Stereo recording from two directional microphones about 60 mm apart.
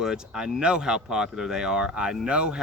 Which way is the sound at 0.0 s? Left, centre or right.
Centre.